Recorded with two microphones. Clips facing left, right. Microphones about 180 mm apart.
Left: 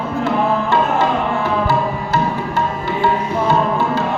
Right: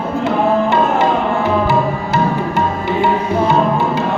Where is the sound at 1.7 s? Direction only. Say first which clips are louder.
Right 2 dB; 20° right (ahead or behind).